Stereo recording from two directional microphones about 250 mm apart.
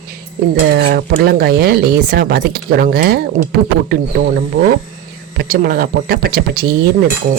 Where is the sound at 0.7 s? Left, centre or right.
Right.